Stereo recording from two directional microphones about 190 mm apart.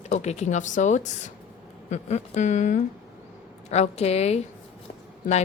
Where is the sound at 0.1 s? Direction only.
35° left (ahead or behind).